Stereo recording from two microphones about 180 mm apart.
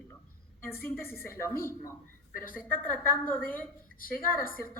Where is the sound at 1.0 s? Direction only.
55° left (ahead or behind).